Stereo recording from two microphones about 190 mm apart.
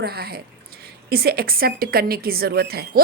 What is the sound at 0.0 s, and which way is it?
Speech, 55° right (ahead or behind).